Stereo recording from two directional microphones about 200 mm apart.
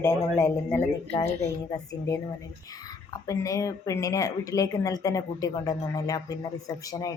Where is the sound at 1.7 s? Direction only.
15° left (ahead or behind).